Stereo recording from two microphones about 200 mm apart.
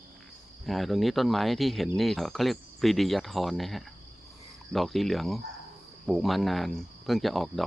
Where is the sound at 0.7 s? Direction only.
Centre (ahead or behind).